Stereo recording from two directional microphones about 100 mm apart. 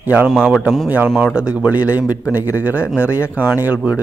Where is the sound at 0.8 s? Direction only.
15° right (ahead or behind).